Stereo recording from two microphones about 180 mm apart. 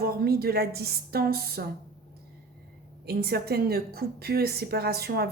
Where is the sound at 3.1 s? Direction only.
60° right (ahead or behind).